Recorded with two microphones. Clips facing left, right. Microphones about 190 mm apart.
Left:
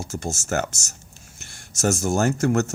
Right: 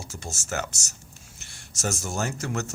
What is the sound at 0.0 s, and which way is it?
Speech, 45° left (ahead or behind).